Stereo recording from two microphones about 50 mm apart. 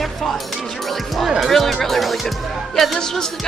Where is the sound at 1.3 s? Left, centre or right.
Centre.